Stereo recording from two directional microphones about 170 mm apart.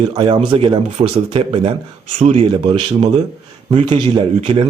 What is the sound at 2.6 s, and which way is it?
A man's voice, 25° right (ahead or behind).